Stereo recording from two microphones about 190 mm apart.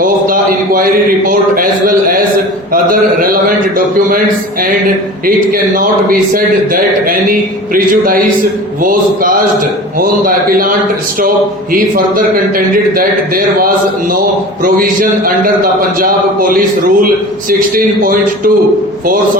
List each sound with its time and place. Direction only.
0.0 s a man's voice: 45° right (ahead or behind)
2.7 s a sound: 45° right (ahead or behind)
5.2 s a man's voice: 50° right (ahead or behind)
7.7 s a man's voice: 50° right (ahead or behind)
11.7 s a man's voice: 45° right (ahead or behind)
16.0 s a man's voice: 50° right (ahead or behind)